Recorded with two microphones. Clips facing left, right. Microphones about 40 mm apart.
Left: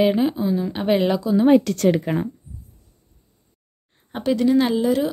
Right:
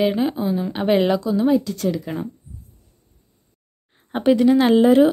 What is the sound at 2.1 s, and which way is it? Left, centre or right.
Speech, left.